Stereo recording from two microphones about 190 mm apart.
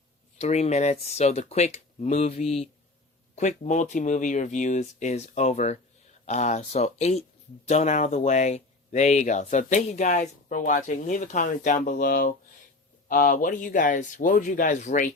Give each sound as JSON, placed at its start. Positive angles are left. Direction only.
{"t": 0.3, "sound": "speech", "side_deg": 35}